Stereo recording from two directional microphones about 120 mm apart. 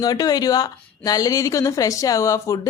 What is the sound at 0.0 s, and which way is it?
Speech, 30° left (ahead or behind).